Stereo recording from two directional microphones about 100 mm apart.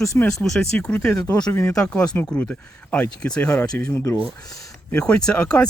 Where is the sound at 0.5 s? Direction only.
10° left (ahead or behind).